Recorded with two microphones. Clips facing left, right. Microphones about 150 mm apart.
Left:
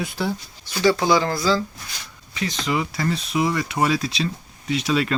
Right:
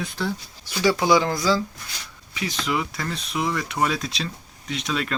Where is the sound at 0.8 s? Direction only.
10° right (ahead or behind); by 5.1 s 5° left (ahead or behind).